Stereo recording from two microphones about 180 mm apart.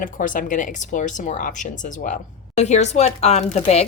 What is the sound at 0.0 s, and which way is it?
Speech, 50° left (ahead or behind).